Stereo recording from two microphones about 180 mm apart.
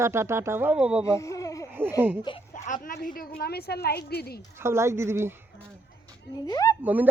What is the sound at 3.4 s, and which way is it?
A woman's voice, 60° left (ahead or behind).